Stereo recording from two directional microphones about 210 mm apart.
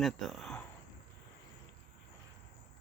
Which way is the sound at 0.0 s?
Centre (ahead or behind).